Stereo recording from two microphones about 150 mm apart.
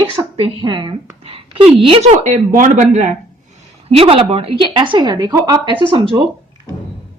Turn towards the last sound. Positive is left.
turn(degrees=-35)  # may be behind; listen again after turning